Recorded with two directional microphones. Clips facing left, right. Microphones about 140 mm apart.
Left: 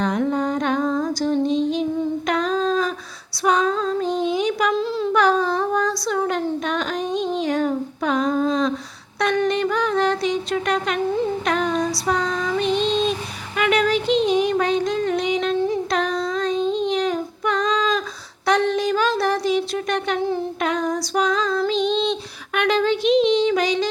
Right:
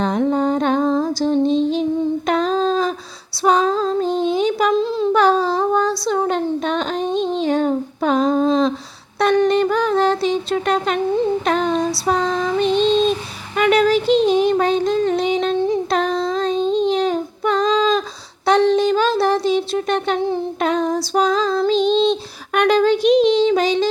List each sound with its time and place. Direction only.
0.0 s music: 30° right (ahead or behind)
2.2 s female singing: 30° right (ahead or behind)
3.4 s child singing: 30° right (ahead or behind)
9.1 s a sound: 30° right (ahead or behind)
11.4 s female singing: 30° right (ahead or behind)
13.6 s a sound: 35° right (ahead or behind)